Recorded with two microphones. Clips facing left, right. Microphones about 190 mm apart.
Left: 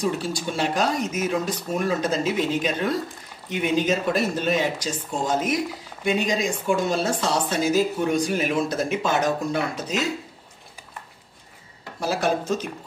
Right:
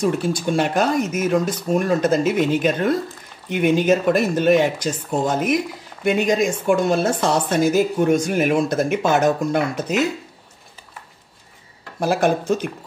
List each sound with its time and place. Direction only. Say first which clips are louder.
0.0 s speech: right 5 dB; 55° right (ahead or behind)
1.9 s speech: right 5 dB; 55° right (ahead or behind)
12.0 s speech: right 5 dB; 55° right (ahead or behind)